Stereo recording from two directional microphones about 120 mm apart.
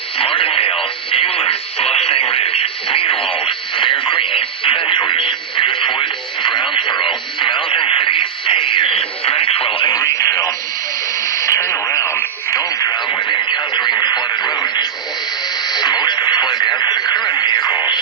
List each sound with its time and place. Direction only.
0.2 s radio: 45° left (ahead or behind)
9.9 s radio: 25° left (ahead or behind)
13.1 s radio: 40° left (ahead or behind)